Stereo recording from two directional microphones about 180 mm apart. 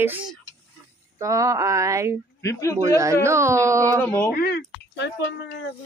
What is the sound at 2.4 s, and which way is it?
Speech, 15° left (ahead or behind).